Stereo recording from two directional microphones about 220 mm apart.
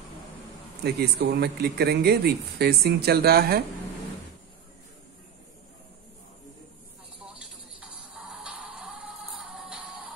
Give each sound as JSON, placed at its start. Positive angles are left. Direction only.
{"t": 0.8, "sound": "speech", "side_deg": -45}
{"t": 7.3, "sound": "music", "side_deg": -5}